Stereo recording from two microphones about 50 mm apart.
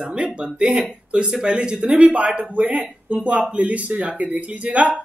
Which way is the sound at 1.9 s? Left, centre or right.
Right.